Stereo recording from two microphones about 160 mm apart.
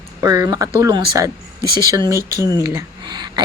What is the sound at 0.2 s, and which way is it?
A woman's voice, 20° right (ahead or behind).